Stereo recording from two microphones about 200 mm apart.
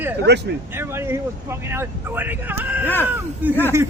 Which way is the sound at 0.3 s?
60° right (ahead or behind).